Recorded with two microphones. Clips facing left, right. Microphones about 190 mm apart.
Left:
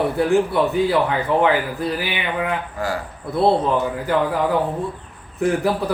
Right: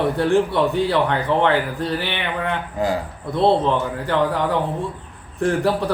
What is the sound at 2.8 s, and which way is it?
Speech, 20° right (ahead or behind).